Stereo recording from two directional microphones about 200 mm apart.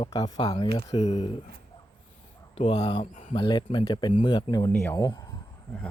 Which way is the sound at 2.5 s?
25° left (ahead or behind).